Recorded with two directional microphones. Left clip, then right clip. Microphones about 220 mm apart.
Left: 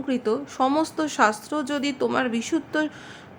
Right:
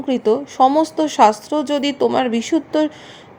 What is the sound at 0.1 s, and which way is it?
Speech, 15° right (ahead or behind).